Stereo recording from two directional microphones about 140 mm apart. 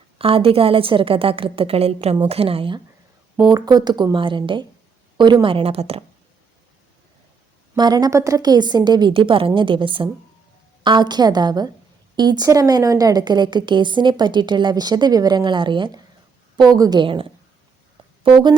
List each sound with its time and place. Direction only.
0.2 s a woman's voice: 40° right (ahead or behind)
7.8 s a woman's voice: 30° right (ahead or behind)
18.2 s a sound: 35° right (ahead or behind)